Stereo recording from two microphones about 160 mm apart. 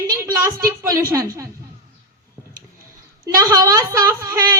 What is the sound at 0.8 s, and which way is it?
Speech, 20° right (ahead or behind).